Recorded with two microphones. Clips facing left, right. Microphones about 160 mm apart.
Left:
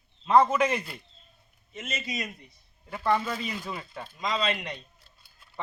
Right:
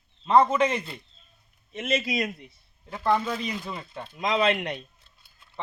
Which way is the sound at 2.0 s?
75° right (ahead or behind).